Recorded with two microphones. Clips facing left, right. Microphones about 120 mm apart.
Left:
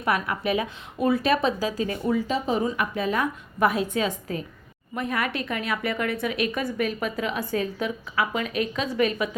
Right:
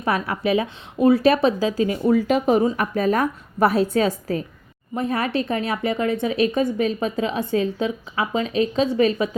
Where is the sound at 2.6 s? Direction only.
35° right (ahead or behind).